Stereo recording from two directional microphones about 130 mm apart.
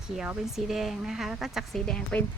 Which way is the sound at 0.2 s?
5° right (ahead or behind).